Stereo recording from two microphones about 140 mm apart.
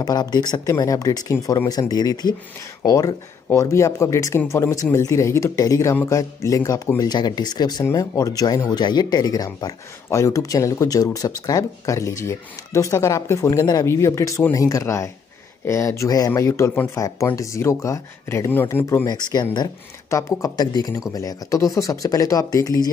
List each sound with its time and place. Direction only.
0.0 s speech: 30° left (ahead or behind)
19.0 s speech: 30° left (ahead or behind)